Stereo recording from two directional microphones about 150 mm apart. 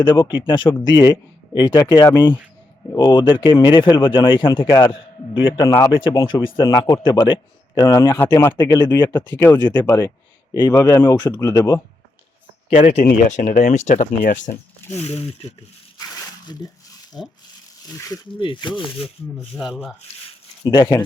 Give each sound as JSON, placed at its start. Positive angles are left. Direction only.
{"t": 0.0, "sound": "a man's voice", "side_deg": 30}
{"t": 5.6, "sound": "speech", "side_deg": 20}
{"t": 5.9, "sound": "a man's voice", "side_deg": 35}
{"t": 8.8, "sound": "speech", "side_deg": 15}
{"t": 9.6, "sound": "a man's voice", "side_deg": 30}
{"t": 12.7, "sound": "speech", "side_deg": 45}
{"t": 13.1, "sound": "speech", "side_deg": 60}
{"t": 14.8, "sound": "speech", "side_deg": 45}
{"t": 16.0, "sound": "a sound", "side_deg": 25}
{"t": 17.1, "sound": "speech", "side_deg": 25}
{"t": 18.3, "sound": "a man's voice", "side_deg": 30}
{"t": 20.7, "sound": "speech", "side_deg": 25}